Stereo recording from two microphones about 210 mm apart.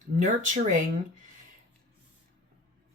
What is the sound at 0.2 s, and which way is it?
Speech, 35° right (ahead or behind).